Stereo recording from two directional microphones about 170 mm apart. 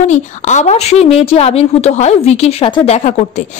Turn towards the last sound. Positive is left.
turn(degrees=40)  # may be behind; listen again after turning